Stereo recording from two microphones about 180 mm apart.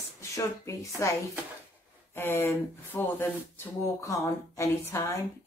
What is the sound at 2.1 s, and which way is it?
Speech, 10° left (ahead or behind).